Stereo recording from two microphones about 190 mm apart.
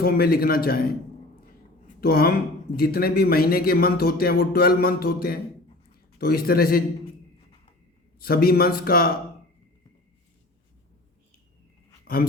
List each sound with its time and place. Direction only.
0.0 s speech: 50° left (ahead or behind)
2.0 s speech: 55° left (ahead or behind)
8.2 s speech: 50° left (ahead or behind)
12.0 s speech: 50° left (ahead or behind)